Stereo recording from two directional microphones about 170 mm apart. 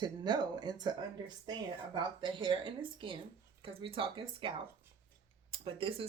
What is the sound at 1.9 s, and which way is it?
Speech, 30° right (ahead or behind).